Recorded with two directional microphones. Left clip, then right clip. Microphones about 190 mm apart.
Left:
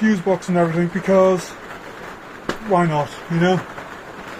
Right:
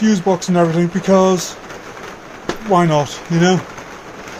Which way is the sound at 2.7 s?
25° right (ahead or behind).